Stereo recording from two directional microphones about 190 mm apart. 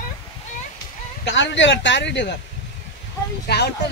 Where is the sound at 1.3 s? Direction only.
70° left (ahead or behind).